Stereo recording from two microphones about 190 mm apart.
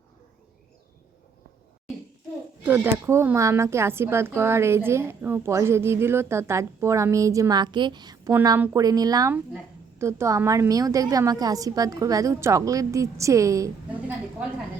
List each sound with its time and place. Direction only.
2.6 s speech: 10° right (ahead or behind)